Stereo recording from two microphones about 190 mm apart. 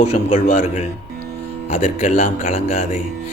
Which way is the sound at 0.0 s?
35° left (ahead or behind).